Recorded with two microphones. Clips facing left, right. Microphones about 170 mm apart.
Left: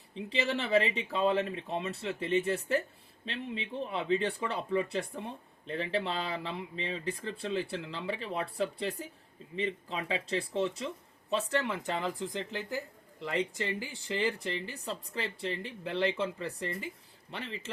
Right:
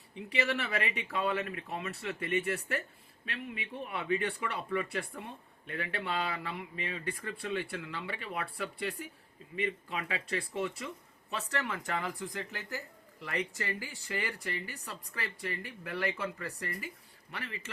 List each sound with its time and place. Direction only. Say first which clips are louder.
0.2 s speech: left 1 dB; 20° left (ahead or behind)